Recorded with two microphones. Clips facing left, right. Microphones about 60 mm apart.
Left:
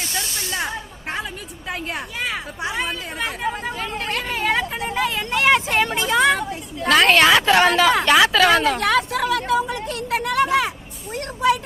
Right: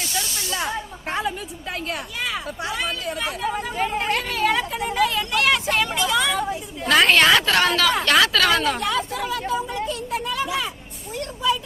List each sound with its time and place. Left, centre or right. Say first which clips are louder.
0.2 s snake: left 1 dB; left
1.0 s a sound: right 3 dB; centre
1.9 s speech: left 1 dB; left
3.8 s speech: right 3 dB; centre
4.3 s vehicle: even; left
5.9 s vehicle: left 4 dB; left
6.8 s a woman's voice: left 2 dB; centre
7.4 s speech: left 4 dB; centre
8.8 s speech: left 5 dB; left
9.9 s vehicle: left 4 dB; left